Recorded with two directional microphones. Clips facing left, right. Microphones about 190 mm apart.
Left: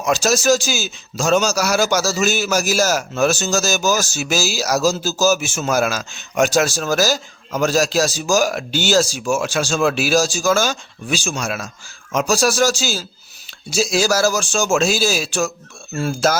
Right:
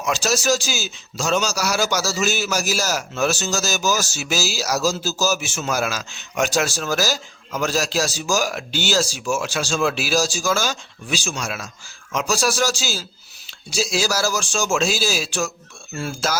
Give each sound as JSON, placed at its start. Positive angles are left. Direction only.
{"t": 0.0, "sound": "a man's voice", "side_deg": 45}